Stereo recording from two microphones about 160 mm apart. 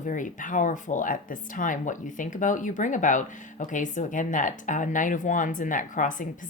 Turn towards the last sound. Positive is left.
turn(degrees=55)  # may be behind; listen again after turning